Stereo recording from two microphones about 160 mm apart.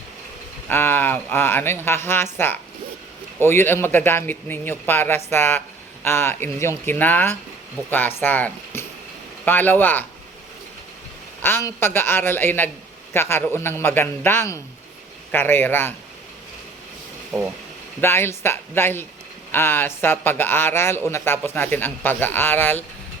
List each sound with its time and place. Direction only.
0.7 s a man's voice: 15° left (ahead or behind)
11.4 s a man's voice: 15° left (ahead or behind)
17.3 s speech: 5° left (ahead or behind)
18.0 s a man's voice: 15° left (ahead or behind)